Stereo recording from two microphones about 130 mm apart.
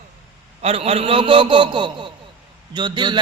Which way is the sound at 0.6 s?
50° right (ahead or behind).